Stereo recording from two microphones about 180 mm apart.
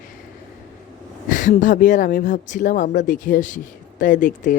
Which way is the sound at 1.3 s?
45° left (ahead or behind).